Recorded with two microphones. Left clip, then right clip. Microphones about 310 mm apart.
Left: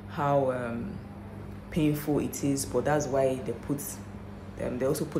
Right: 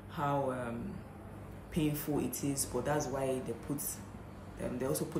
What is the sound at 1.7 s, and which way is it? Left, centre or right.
Speech, centre.